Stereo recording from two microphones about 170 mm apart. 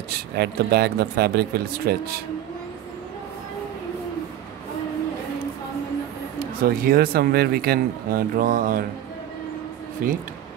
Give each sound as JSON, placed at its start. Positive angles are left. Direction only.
{"t": 0.1, "sound": "speech", "side_deg": -70}
{"t": 6.4, "sound": "speech", "side_deg": -60}
{"t": 10.0, "sound": "speech", "side_deg": -55}